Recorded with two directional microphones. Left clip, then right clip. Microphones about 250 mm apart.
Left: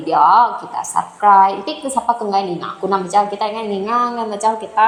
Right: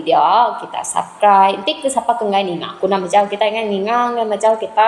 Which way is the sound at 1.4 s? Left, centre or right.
Left.